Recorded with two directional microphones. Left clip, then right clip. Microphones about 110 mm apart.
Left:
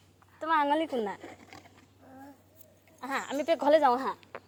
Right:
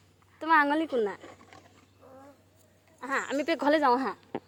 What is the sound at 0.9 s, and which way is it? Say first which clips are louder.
Speech: right 4 dB; 30° right (ahead or behind).